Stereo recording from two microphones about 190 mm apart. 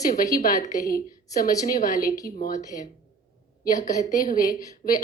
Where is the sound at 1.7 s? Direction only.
45° left (ahead or behind).